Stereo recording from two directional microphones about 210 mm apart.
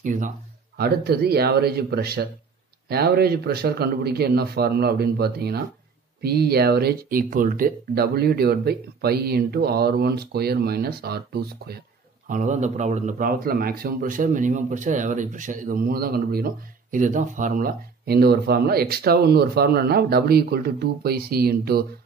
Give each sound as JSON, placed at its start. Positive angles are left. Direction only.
{"t": 0.0, "sound": "a man's voice", "side_deg": -35}
{"t": 12.3, "sound": "a man's voice", "side_deg": -35}